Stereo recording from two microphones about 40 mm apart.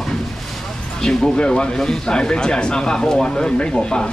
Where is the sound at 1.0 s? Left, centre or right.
Centre.